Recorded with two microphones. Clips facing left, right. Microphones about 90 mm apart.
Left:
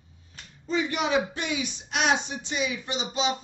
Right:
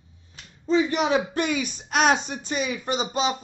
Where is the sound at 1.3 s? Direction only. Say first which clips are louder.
Right 5 dB; 50° right (ahead or behind).